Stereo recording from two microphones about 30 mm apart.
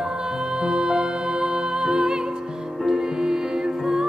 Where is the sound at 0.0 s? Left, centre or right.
Right.